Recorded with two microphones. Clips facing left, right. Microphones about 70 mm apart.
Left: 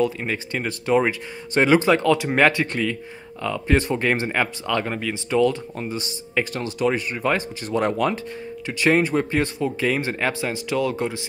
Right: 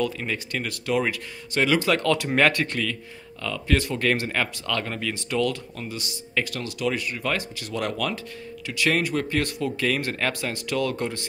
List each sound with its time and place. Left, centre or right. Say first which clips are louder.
0.0 s speech: left 4 dB; left